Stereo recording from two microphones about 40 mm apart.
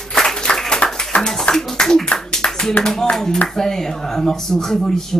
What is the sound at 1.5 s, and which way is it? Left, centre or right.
Speech, centre.